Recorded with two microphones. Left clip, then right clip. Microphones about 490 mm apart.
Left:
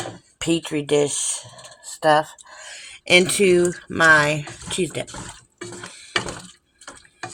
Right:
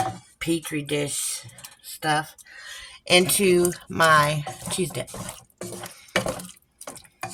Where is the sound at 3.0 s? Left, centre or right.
Right.